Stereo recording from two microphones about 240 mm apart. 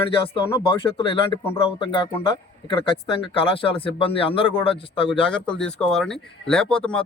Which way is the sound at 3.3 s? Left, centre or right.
Left.